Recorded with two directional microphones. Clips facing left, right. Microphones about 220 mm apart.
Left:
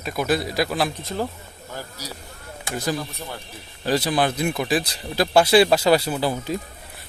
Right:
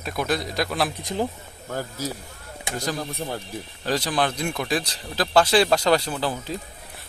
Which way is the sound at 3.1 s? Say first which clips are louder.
Right 5 dB; 40° right (ahead or behind).